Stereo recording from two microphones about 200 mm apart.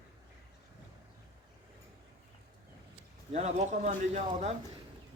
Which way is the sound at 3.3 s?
35° right (ahead or behind).